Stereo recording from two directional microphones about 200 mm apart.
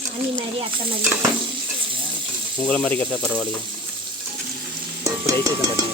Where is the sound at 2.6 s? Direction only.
5° left (ahead or behind).